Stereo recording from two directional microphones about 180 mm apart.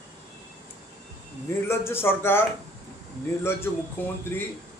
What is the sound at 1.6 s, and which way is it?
Speech, 15° left (ahead or behind).